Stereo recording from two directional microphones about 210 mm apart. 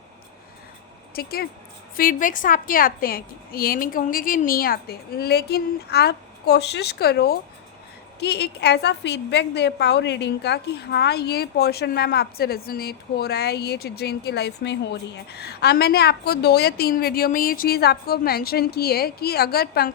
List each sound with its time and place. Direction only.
1.1 s a woman's voice: 45° left (ahead or behind)